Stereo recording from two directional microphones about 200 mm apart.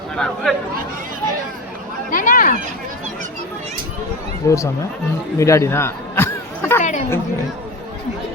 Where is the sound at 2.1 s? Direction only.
45° left (ahead or behind).